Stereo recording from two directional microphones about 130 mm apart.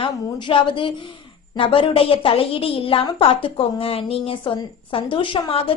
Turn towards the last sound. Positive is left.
turn(degrees=45)  # may be behind; listen again after turning